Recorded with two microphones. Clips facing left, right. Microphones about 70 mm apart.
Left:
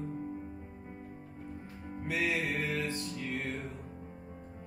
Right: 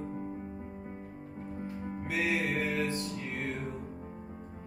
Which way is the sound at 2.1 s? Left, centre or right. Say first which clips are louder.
Right 2 dB; centre.